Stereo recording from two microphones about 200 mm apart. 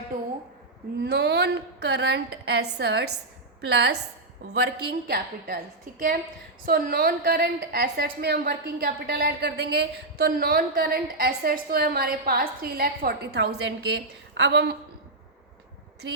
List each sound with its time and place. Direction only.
1.0 s a woman's voice: 55° right (ahead or behind)
6.7 s a woman's voice: 50° right (ahead or behind)